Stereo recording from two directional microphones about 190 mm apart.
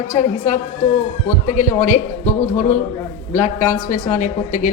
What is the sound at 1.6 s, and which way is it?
Speech, 40° left (ahead or behind).